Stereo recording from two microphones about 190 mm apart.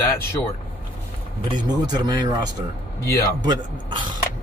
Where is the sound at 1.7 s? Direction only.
20° right (ahead or behind).